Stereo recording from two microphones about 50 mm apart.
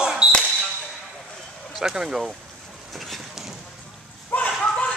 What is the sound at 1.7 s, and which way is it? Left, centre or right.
Speech, centre.